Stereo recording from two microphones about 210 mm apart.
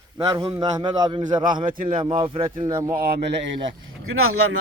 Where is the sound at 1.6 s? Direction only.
40° right (ahead or behind).